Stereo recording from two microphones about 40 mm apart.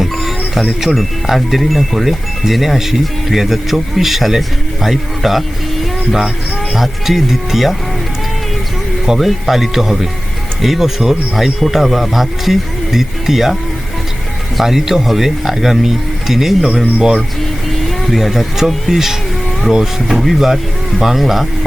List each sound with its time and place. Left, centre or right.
0.0 s music: centre
0.8 s speech: centre
5.8 s music: centre
6.7 s speech: centre
9.0 s speech: centre
14.6 s speech: centre
17.0 s speech: centre
18.0 s speech: centre